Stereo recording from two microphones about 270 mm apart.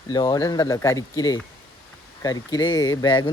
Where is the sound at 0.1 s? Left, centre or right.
Centre.